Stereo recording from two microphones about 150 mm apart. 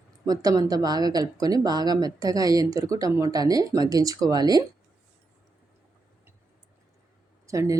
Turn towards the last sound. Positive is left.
turn(degrees=-20)  # may be behind; listen again after turning